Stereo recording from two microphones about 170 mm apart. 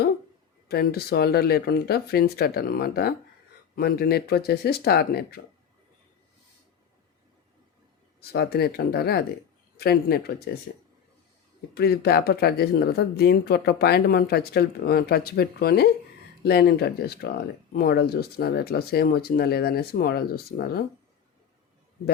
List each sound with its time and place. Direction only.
0.7 s speech: 65° left (ahead or behind)
8.3 s speech: 70° left (ahead or behind)
11.7 s speech: 70° left (ahead or behind)